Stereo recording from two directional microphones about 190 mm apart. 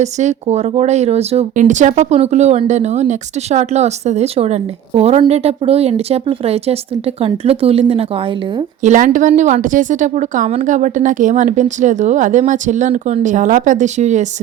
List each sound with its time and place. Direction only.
0.0 s speech: 35° right (ahead or behind)
8.8 s speech: 40° right (ahead or behind)